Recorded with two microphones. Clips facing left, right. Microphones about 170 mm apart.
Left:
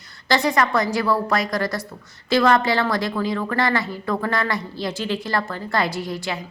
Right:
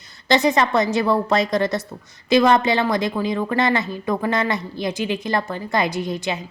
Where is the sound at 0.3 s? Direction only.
20° right (ahead or behind).